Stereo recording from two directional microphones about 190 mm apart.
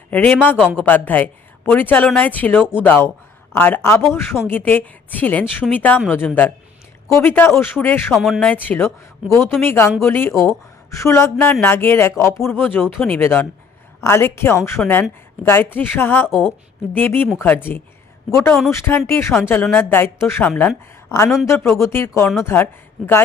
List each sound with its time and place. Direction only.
0.1 s speech: 10° left (ahead or behind)
8.1 s speech: centre (ahead or behind)
13.1 s a woman's voice: 10° left (ahead or behind)